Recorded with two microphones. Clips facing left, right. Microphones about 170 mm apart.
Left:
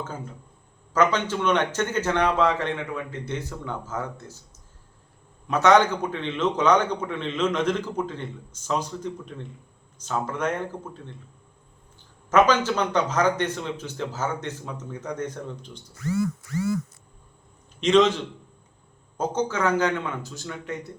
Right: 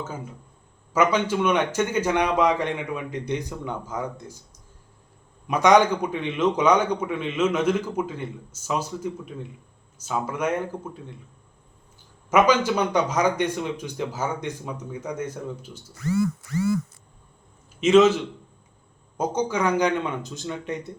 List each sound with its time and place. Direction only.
0.0 s a man's voice: 10° right (ahead or behind)
5.5 s a man's voice: 15° right (ahead or behind)
12.3 s a man's voice: 10° right (ahead or behind)
17.7 s a man's voice: 5° right (ahead or behind)